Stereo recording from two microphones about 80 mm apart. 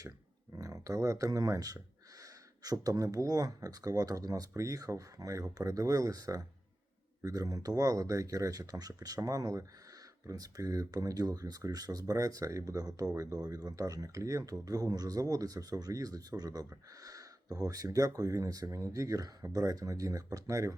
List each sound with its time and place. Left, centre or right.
0.5 s speech: right